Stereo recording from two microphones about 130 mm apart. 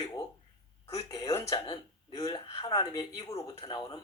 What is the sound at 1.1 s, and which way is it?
Speech, 25° left (ahead or behind).